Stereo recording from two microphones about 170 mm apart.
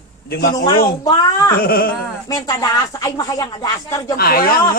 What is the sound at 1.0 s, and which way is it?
Speech, 25° left (ahead or behind).